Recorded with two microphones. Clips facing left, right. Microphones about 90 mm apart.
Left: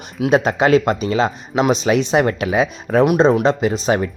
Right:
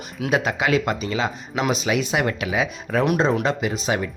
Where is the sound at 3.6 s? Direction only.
35° left (ahead or behind).